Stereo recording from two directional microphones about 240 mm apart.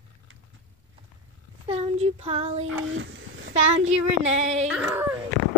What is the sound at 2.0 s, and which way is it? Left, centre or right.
Child singing, right.